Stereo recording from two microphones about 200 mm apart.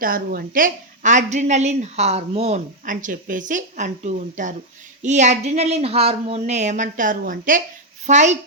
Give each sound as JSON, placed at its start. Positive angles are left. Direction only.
{"t": 0.0, "sound": "a woman's voice", "side_deg": -45}